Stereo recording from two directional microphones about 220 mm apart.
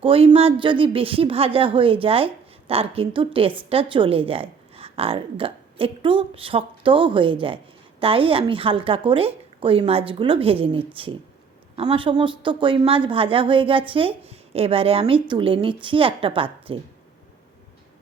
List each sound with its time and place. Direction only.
0.0 s speech: 25° right (ahead or behind)